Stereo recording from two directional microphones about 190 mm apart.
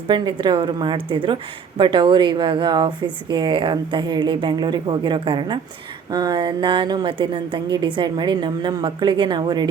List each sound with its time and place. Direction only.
0.1 s speech: 25° right (ahead or behind)